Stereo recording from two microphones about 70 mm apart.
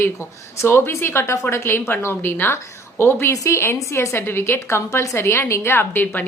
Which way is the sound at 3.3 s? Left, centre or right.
Left.